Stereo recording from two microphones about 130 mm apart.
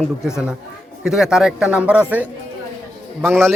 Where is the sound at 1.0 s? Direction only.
5° right (ahead or behind).